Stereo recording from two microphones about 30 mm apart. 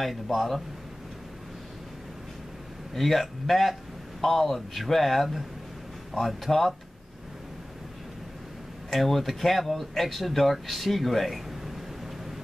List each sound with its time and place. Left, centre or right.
0.0 s speech: centre
2.9 s speech: centre
8.9 s speech: centre